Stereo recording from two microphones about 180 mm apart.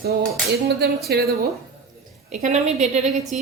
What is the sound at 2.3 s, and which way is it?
A woman's voice, 40° right (ahead or behind).